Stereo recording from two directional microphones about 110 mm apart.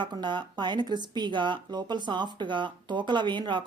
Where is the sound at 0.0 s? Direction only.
45° right (ahead or behind).